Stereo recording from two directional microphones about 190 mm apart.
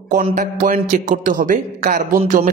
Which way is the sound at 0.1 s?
40° right (ahead or behind).